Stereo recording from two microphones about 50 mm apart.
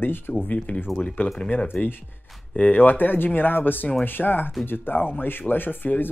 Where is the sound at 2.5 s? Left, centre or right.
Left.